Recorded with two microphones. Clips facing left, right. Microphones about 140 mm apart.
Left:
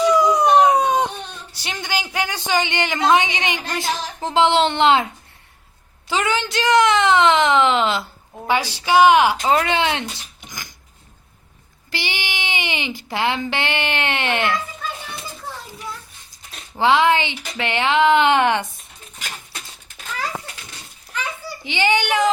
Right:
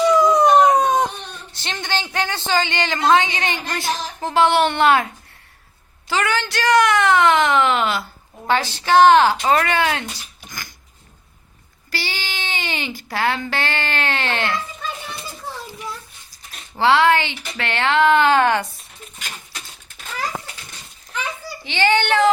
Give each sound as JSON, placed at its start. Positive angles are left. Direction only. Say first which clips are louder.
{"t": 0.1, "sound": "a sound", "louder": "right 2 dB", "side_deg": 10}
{"t": 1.5, "sound": "speech", "louder": "right 1 dB", "side_deg": 10}
{"t": 6.1, "sound": "speech", "louder": "even", "side_deg": 20}
{"t": 11.9, "sound": "speech", "louder": "left 1 dB", "side_deg": 20}
{"t": 16.7, "sound": "speech", "louder": "right 1 dB", "side_deg": 15}
{"t": 21.6, "sound": "speech", "louder": "right 1 dB", "side_deg": 15}